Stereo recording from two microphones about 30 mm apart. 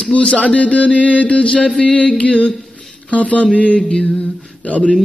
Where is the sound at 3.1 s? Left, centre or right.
Left.